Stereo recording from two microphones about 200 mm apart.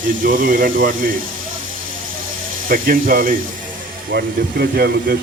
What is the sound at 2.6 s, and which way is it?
Speech, 45° right (ahead or behind).